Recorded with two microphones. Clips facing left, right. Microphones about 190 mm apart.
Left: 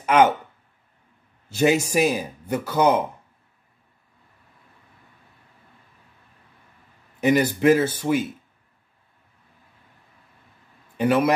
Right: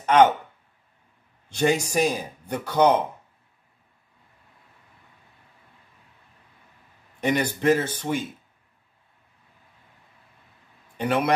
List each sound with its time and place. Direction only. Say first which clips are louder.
0.0 s speech: even; 10° left (ahead or behind)
1.5 s speech: left 3 dB; 5° left (ahead or behind)
7.2 s speech: left 5 dB; 5° left (ahead or behind)
11.0 s a man's voice: left 4 dB; 5° left (ahead or behind)